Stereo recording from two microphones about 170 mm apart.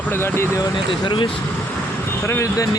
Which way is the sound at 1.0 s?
25° left (ahead or behind).